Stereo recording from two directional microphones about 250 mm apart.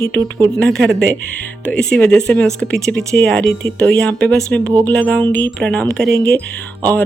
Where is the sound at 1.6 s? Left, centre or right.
Centre.